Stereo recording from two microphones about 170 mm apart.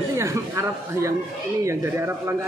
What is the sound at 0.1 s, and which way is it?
Speech, 15° right (ahead or behind).